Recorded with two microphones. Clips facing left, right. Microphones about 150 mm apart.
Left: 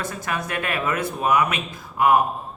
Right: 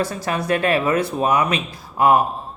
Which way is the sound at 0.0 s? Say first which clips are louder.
Right 5 dB; 30° right (ahead or behind).